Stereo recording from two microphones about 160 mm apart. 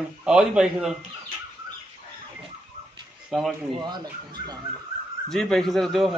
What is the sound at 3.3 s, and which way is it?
Speech, centre (ahead or behind).